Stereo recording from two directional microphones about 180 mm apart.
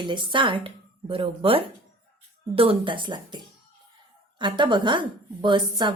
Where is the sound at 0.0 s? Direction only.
25° right (ahead or behind).